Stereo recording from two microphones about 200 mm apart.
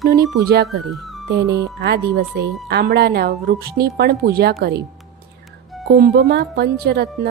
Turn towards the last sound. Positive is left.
turn(degrees=-55)  # may be behind; listen again after turning